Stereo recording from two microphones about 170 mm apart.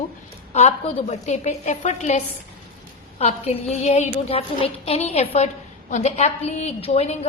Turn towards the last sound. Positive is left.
turn(degrees=40)  # may be behind; listen again after turning